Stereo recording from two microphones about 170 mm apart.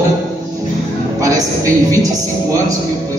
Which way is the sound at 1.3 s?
20° right (ahead or behind).